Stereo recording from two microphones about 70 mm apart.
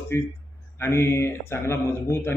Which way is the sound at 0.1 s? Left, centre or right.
Left.